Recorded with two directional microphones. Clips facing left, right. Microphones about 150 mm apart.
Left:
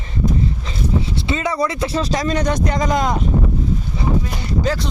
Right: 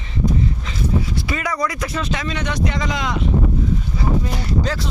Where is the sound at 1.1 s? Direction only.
25° left (ahead or behind); by 3.2 s 45° left (ahead or behind).